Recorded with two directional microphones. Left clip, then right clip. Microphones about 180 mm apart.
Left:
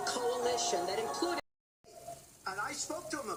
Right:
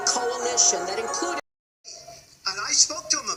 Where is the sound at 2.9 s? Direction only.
20° right (ahead or behind).